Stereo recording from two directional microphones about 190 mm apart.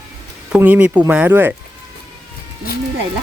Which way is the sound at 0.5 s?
10° right (ahead or behind).